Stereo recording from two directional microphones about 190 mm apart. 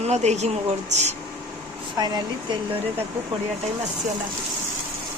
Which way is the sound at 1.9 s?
20° right (ahead or behind).